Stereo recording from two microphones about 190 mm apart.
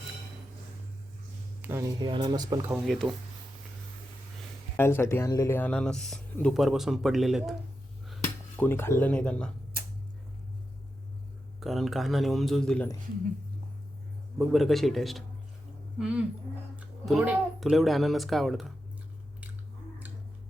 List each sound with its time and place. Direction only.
1.6 s speech: 15° right (ahead or behind)
2.6 s speech: 5° right (ahead or behind)
4.8 s speech: 10° left (ahead or behind)
8.5 s speech: 10° left (ahead or behind)
11.6 s speech: centre (ahead or behind)
14.3 s speech: centre (ahead or behind)